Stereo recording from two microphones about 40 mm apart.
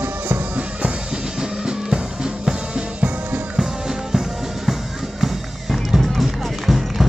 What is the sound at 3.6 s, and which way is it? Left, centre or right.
Music, centre.